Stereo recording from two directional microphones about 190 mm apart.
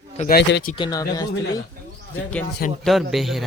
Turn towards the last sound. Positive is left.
turn(degrees=0)  # may be behind; listen again after turning